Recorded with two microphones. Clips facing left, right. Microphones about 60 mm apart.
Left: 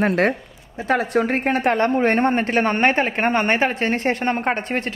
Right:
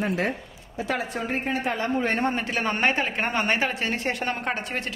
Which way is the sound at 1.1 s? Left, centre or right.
Left.